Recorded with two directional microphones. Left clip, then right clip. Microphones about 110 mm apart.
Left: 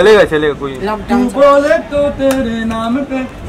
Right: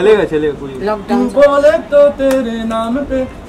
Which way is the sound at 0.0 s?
50° left (ahead or behind).